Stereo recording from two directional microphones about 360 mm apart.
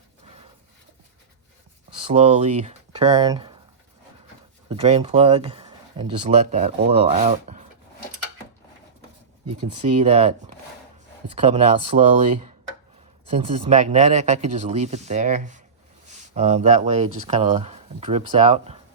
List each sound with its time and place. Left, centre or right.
2.1 s speech: centre
4.7 s speech: centre
9.7 s speech: centre